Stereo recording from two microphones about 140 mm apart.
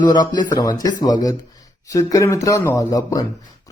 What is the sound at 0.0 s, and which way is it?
Speech, 30° left (ahead or behind).